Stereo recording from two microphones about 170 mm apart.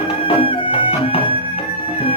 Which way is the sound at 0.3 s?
30° left (ahead or behind).